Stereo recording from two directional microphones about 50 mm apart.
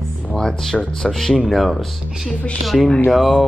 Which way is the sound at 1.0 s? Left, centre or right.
Centre.